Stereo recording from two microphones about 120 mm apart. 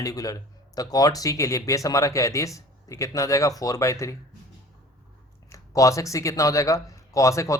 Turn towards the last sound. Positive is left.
turn(degrees=25)  # may be behind; listen again after turning